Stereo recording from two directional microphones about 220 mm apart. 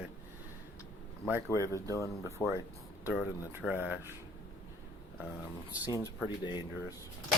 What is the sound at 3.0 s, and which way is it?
Speech, 5° right (ahead or behind).